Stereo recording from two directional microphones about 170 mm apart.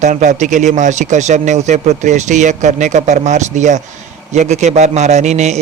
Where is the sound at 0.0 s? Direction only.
45° right (ahead or behind).